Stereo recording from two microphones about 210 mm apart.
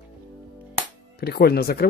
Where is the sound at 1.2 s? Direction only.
50° left (ahead or behind).